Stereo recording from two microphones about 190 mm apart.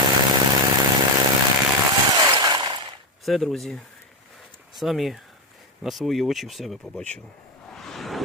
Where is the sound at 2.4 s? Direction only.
20° right (ahead or behind).